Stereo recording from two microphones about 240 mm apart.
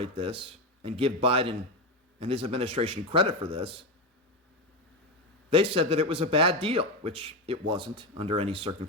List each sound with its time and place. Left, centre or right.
0.0 s a man's voice: right
5.5 s a man's voice: right